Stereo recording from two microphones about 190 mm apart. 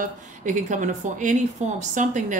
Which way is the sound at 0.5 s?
40° right (ahead or behind).